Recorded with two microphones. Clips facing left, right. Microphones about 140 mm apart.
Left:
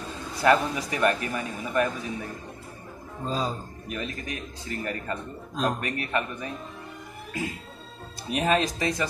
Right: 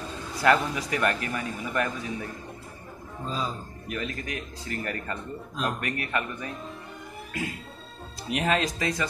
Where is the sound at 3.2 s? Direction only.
40° left (ahead or behind).